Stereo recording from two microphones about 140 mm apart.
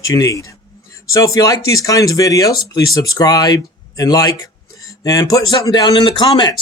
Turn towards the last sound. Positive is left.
turn(degrees=30)  # may be behind; listen again after turning